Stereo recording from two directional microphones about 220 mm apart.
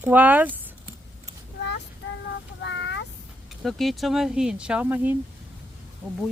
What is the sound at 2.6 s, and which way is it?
Child singing, 55° left (ahead or behind).